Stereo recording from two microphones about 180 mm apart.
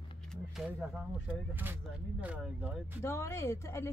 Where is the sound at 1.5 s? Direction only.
10° right (ahead or behind).